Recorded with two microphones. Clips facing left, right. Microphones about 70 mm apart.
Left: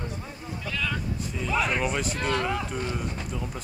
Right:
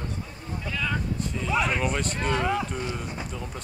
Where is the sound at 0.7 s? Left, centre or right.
Centre.